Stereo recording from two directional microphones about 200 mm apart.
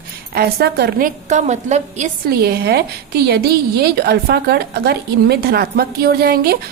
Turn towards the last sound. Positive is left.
turn(degrees=-50)  # may be behind; listen again after turning